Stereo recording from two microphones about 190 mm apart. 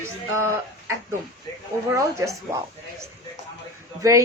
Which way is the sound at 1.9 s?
15° right (ahead or behind).